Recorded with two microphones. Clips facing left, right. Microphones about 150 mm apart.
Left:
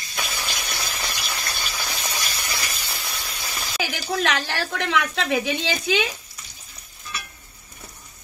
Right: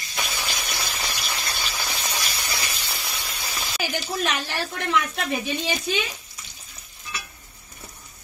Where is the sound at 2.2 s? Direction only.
Centre (ahead or behind).